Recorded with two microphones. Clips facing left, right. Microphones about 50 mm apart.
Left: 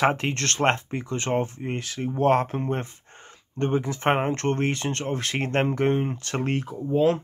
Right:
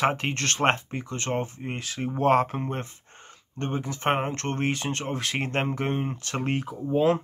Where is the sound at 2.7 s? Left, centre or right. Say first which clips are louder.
Left 3 dB; centre.